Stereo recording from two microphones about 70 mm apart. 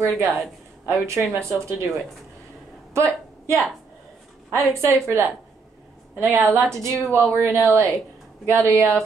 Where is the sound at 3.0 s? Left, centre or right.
Right.